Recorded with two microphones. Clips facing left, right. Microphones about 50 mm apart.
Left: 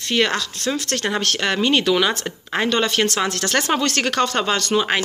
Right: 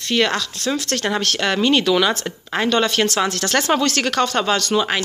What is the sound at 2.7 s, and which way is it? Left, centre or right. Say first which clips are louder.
Speech: right 2 dB; left.